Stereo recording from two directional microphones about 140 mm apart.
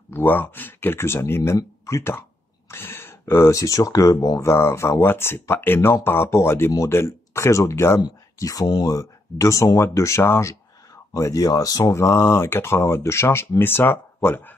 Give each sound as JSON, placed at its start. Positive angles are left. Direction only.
{"t": 0.1, "sound": "speech", "side_deg": 15}